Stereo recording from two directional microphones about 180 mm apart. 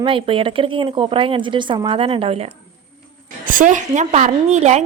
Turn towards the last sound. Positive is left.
turn(degrees=-40)  # may be behind; listen again after turning